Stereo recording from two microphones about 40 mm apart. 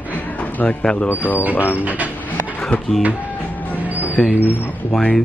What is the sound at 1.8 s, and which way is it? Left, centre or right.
Speech, right.